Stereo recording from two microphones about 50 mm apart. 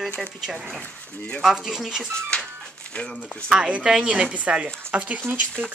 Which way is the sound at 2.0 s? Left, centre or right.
Centre.